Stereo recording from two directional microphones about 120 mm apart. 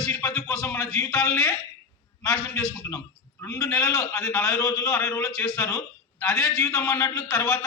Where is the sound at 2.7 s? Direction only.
20° left (ahead or behind).